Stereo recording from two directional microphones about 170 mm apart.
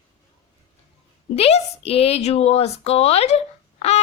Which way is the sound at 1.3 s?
35° left (ahead or behind).